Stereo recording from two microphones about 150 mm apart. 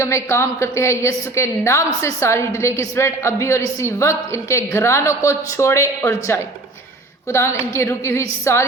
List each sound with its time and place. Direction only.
0.0 s a woman's voice: 20° left (ahead or behind)
7.3 s a woman's voice: 20° left (ahead or behind)